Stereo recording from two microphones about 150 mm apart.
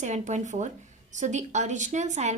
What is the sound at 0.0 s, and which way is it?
A woman's voice, 50° right (ahead or behind).